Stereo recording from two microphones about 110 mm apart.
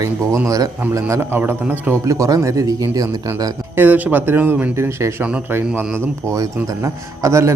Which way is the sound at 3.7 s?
15° right (ahead or behind).